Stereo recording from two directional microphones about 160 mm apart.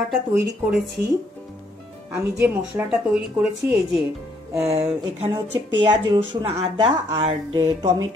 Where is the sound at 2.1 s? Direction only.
10° right (ahead or behind).